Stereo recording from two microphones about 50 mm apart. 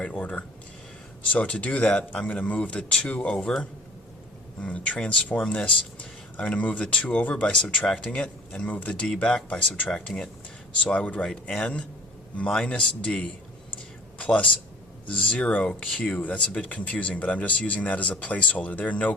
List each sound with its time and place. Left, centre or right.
0.0 s speech: left
4.6 s speech: left
7.4 s speech: centre
8.6 s speech: left
8.9 s speech: centre
15.0 s speech: left
16.1 s speech: left